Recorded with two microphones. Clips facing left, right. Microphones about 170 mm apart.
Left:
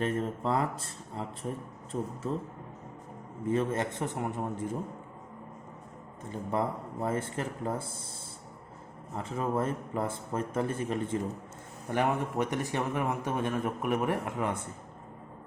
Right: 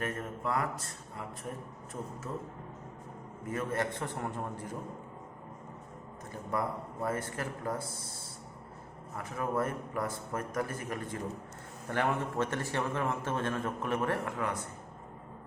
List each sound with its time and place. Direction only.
0.0 s speech: 30° left (ahead or behind)
1.9 s speech: 40° left (ahead or behind)
3.4 s speech: 25° left (ahead or behind)
6.3 s speech: 25° left (ahead or behind)
9.1 s a man's voice: 25° left (ahead or behind)